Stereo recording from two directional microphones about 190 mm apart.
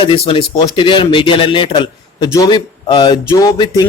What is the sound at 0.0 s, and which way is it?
Speech, 25° left (ahead or behind).